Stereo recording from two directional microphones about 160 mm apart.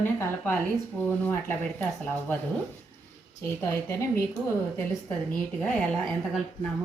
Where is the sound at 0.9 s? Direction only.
10° left (ahead or behind).